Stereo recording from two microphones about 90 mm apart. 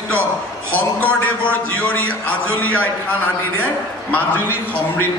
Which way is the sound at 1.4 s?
15° left (ahead or behind).